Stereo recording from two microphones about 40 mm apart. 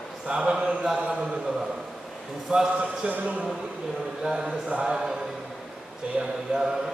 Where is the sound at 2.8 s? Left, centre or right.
Right.